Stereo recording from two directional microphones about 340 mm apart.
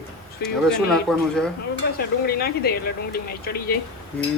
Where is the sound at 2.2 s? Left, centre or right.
Left.